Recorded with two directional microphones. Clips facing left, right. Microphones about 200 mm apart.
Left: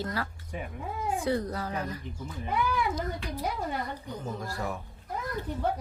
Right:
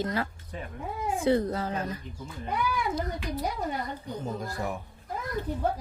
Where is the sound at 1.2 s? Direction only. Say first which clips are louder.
Right 7 dB; 25° right (ahead or behind).